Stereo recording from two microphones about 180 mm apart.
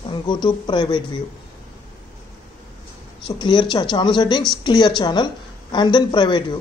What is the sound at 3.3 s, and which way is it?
Speech, 25° left (ahead or behind).